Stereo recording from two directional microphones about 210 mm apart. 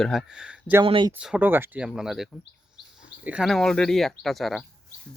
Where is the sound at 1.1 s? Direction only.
5° right (ahead or behind).